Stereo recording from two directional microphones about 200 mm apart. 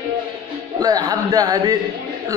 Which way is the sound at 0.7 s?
20° right (ahead or behind).